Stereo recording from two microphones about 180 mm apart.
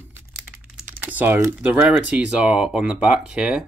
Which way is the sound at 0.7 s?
10° right (ahead or behind).